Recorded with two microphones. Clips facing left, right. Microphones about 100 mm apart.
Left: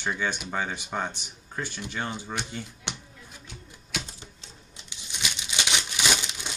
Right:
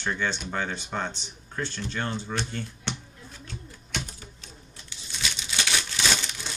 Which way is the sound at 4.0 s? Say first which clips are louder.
Right 3 dB; 25° left (ahead or behind).